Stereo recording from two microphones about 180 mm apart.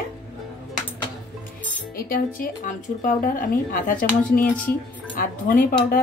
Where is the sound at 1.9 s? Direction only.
55° left (ahead or behind).